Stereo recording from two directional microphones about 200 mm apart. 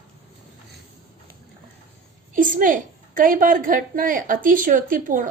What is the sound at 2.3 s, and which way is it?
A woman's voice, 45° right (ahead or behind).